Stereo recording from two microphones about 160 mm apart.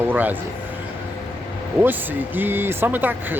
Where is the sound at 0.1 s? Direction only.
10° right (ahead or behind).